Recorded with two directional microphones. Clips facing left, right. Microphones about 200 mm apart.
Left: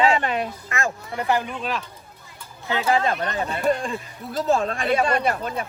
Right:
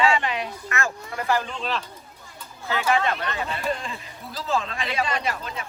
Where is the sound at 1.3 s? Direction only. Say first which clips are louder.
Left 1 dB; 15° left (ahead or behind).